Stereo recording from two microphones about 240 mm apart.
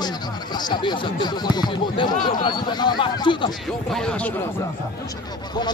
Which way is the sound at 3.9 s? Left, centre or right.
Centre.